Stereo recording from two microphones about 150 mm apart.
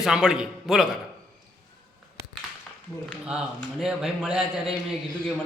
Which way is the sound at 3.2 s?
5° right (ahead or behind).